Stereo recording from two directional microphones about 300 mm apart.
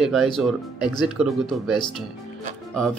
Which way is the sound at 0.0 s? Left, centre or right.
Centre.